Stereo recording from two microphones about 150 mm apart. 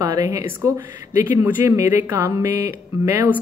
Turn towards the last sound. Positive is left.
turn(degrees=-15)  # may be behind; listen again after turning